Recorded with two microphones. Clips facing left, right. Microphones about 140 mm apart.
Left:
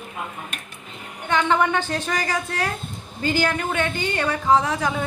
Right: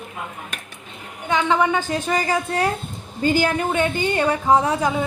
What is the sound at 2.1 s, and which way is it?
A woman's voice, 15° right (ahead or behind).